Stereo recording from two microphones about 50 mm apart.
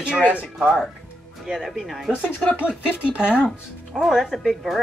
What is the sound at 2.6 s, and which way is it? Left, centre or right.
Speech, right.